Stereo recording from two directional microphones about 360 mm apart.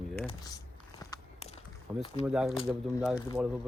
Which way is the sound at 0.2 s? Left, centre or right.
Centre.